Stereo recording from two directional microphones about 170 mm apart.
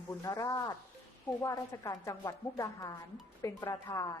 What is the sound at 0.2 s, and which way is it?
Speech, 20° left (ahead or behind).